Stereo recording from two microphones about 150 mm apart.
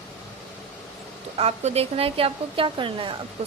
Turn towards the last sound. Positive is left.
turn(degrees=-35)  # may be behind; listen again after turning